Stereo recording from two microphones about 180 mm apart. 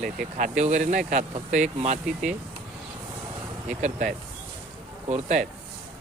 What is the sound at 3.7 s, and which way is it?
Speech, 40° right (ahead or behind).